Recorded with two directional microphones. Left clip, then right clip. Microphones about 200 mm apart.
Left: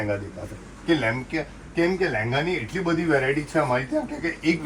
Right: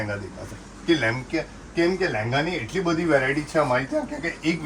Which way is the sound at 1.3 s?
5° right (ahead or behind).